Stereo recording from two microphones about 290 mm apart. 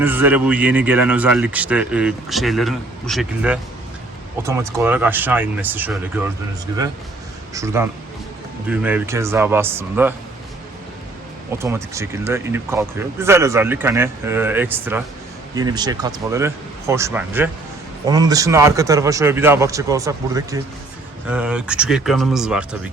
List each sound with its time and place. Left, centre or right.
0.0 s speech: centre
7.5 s speech: centre
11.5 s speech: centre